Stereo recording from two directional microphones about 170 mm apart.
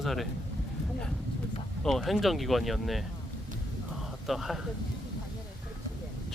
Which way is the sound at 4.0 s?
Centre (ahead or behind).